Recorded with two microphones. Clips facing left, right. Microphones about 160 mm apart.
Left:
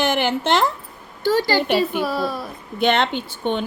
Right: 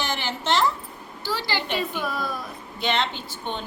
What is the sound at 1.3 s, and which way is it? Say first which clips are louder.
Speech: left 10 dB; 45° left (ahead or behind).